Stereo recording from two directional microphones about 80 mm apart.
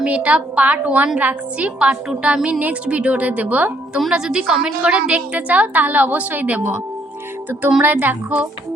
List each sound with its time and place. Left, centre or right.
0.0 s a woman's voice: centre
4.0 s a woman's voice: centre
7.8 s a woman's voice: right